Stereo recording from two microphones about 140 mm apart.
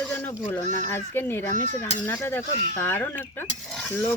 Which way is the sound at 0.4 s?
15° left (ahead or behind).